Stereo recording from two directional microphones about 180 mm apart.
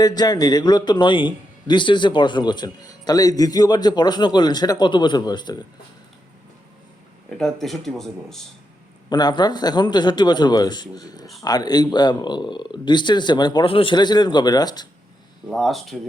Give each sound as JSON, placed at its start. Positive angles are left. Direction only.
{"t": 0.0, "sound": "a man's voice", "side_deg": 20}
{"t": 7.3, "sound": "speech", "side_deg": 5}
{"t": 9.0, "sound": "a man's voice", "side_deg": 25}
{"t": 15.4, "sound": "speech", "side_deg": 0}